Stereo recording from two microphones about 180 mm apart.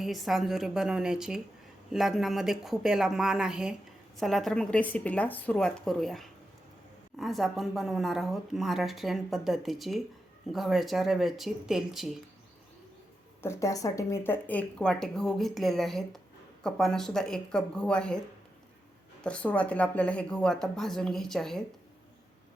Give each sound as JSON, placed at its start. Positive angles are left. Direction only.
{"t": 0.0, "sound": "a woman's voice", "side_deg": 0}
{"t": 13.4, "sound": "a woman's voice", "side_deg": 15}
{"t": 19.2, "sound": "a woman's voice", "side_deg": 5}